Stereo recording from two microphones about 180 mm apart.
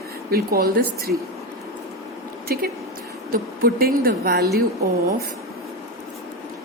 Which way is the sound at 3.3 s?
55° right (ahead or behind).